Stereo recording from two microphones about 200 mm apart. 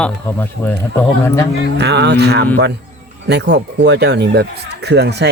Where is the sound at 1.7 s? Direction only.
60° right (ahead or behind).